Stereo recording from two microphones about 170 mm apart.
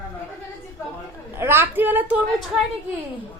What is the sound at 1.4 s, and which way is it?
A woman's voice, 15° right (ahead or behind).